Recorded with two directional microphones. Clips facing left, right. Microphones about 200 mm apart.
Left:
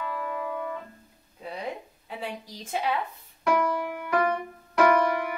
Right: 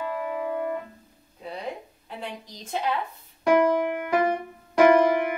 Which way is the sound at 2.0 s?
5° left (ahead or behind).